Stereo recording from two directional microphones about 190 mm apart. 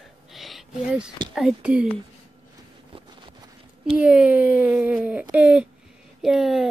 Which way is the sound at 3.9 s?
5° right (ahead or behind).